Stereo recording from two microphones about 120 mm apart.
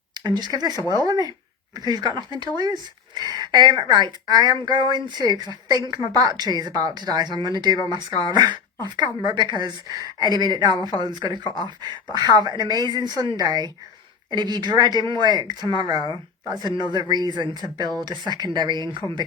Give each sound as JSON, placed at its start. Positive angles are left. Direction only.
{"t": 0.2, "sound": "speech", "side_deg": -35}
{"t": 0.8, "sound": "speech", "side_deg": 35}
{"t": 1.0, "sound": "speech", "side_deg": -30}
{"t": 11.4, "sound": "speech", "side_deg": 40}
{"t": 11.8, "sound": "speech", "side_deg": -35}
{"t": 19.0, "sound": "speech", "side_deg": 25}